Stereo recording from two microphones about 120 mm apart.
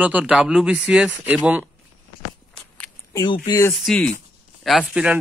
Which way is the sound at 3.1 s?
40° left (ahead or behind).